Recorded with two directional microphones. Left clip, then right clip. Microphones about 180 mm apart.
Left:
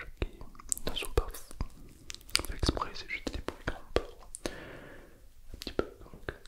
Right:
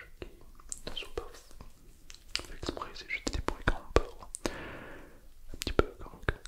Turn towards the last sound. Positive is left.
turn(degrees=-20)  # may be behind; listen again after turning